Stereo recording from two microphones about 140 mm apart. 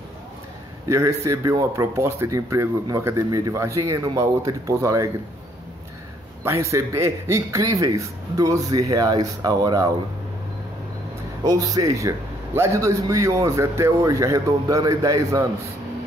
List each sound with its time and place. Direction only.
0.9 s speech: 20° right (ahead or behind)
6.4 s speech: 20° right (ahead or behind)
11.4 s speech: 25° right (ahead or behind)